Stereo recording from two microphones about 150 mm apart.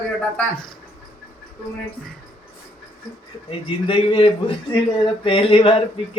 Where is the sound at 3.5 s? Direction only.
40° left (ahead or behind).